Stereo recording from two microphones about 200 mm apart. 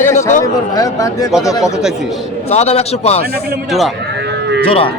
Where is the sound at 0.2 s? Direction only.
40° left (ahead or behind).